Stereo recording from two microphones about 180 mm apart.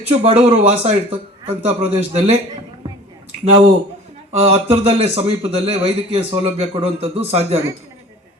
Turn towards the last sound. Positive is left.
turn(degrees=-35)  # may be behind; listen again after turning